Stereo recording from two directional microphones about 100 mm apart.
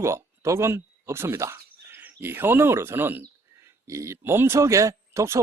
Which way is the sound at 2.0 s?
20° right (ahead or behind).